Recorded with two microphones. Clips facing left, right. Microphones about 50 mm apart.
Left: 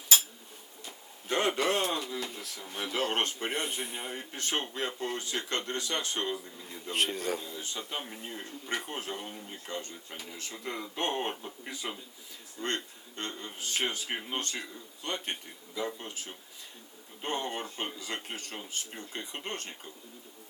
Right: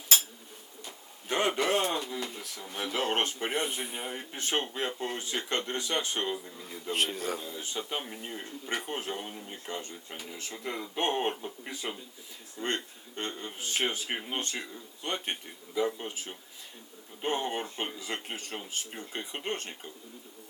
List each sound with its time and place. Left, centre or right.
1.3 s a man's voice: centre
7.6 s a man's voice: centre